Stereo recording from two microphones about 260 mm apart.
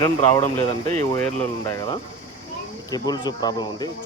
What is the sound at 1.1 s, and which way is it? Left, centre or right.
Speech, centre.